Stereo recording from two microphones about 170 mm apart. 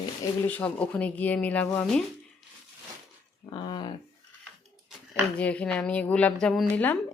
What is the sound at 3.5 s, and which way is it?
Speech, 30° left (ahead or behind).